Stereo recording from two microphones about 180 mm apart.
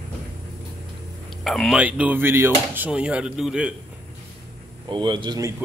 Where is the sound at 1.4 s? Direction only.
Centre (ahead or behind).